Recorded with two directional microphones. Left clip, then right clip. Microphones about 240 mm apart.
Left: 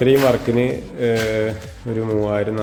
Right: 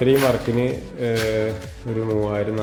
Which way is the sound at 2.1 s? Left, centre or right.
Centre.